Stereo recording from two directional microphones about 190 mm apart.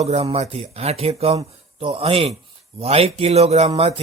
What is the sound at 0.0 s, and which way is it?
Speech, 35° right (ahead or behind).